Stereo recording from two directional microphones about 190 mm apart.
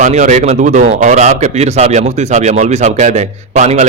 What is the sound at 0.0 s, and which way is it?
A man's voice, 35° right (ahead or behind).